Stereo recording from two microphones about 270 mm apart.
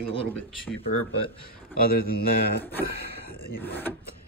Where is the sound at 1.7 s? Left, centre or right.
Left.